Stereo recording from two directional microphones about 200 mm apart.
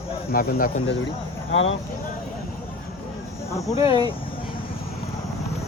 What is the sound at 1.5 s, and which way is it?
Speech, 75° left (ahead or behind).